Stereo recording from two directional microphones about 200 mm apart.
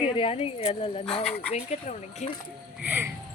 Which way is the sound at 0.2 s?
30° left (ahead or behind).